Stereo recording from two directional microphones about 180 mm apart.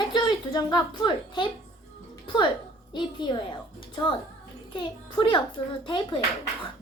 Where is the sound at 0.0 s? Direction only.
25° left (ahead or behind).